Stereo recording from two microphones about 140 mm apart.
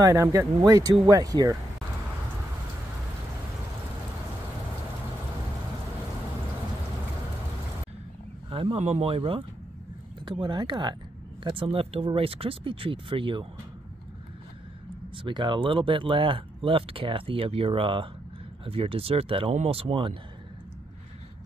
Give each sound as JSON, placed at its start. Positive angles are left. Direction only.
{"t": 0.0, "sound": "speech", "side_deg": -20}
{"t": 8.5, "sound": "speech", "side_deg": -40}
{"t": 15.2, "sound": "speech", "side_deg": -35}